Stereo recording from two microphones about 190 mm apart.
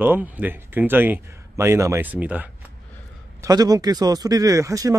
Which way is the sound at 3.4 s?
20° right (ahead or behind).